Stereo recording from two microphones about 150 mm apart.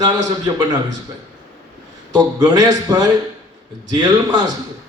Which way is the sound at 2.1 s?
25° right (ahead or behind).